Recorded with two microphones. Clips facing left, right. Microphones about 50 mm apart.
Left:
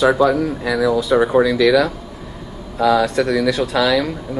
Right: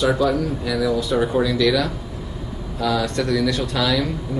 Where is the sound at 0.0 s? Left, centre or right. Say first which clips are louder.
Left 5 dB; centre.